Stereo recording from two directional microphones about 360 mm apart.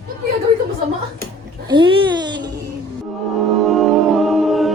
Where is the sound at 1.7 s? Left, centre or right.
Centre.